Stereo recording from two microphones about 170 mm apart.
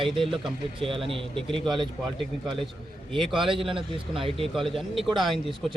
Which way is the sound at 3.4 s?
30° right (ahead or behind).